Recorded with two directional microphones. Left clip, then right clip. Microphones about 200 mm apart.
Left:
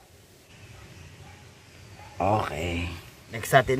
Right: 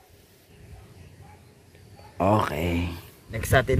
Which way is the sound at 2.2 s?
50° right (ahead or behind).